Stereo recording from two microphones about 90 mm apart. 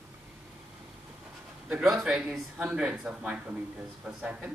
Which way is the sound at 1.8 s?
5° right (ahead or behind).